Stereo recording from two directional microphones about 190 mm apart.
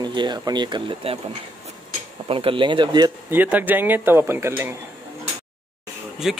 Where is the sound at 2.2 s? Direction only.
30° right (ahead or behind).